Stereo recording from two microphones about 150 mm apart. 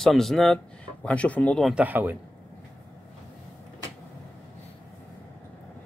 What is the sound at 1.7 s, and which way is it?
Speech, 10° right (ahead or behind).